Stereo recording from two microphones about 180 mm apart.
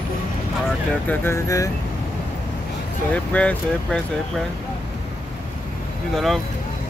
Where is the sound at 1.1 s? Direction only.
15° left (ahead or behind).